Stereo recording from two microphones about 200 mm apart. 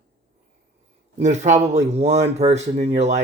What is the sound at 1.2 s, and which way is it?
Speech, 35° right (ahead or behind).